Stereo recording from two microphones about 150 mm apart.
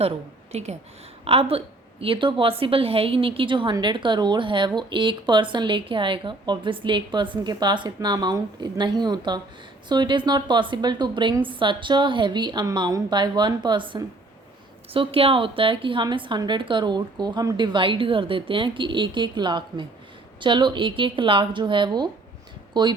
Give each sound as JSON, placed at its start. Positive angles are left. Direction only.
{"t": 0.5, "sound": "a woman's voice", "side_deg": -45}